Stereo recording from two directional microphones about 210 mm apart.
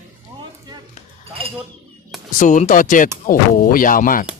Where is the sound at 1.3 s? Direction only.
25° right (ahead or behind).